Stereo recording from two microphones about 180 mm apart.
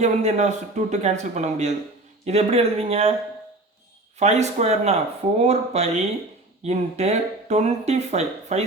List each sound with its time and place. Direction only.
0.0 s speech: 40° right (ahead or behind)
4.2 s speech: 40° right (ahead or behind)